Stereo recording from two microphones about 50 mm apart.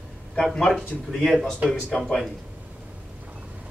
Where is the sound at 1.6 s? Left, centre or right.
Right.